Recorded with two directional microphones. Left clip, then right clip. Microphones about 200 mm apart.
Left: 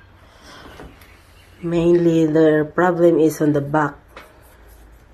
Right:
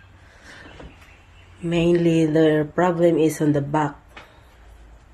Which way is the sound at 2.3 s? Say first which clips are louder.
Left 3 dB; 25° right (ahead or behind).